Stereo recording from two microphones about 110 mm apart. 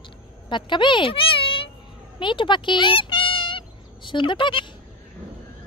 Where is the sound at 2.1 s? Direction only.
50° left (ahead or behind).